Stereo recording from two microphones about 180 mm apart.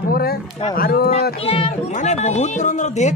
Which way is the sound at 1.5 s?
35° left (ahead or behind).